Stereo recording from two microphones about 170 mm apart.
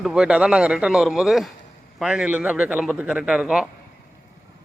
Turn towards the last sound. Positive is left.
turn(degrees=-5)  # may be behind; listen again after turning